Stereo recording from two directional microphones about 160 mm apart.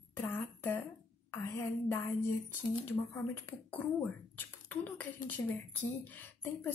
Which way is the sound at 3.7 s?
10° left (ahead or behind).